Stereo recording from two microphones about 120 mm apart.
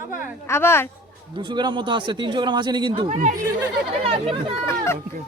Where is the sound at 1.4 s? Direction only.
40° right (ahead or behind).